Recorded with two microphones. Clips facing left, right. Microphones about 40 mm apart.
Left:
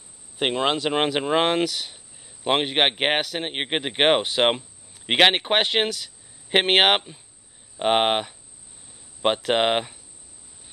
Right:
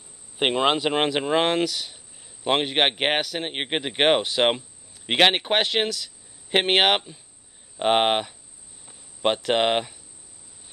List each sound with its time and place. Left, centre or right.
0.4 s speech: centre
0.9 s a man's voice: centre
7.7 s a man's voice: centre